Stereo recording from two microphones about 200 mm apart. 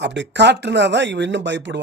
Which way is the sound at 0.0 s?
60° right (ahead or behind).